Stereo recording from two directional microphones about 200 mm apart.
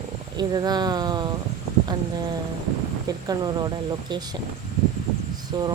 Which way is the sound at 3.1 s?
20° right (ahead or behind).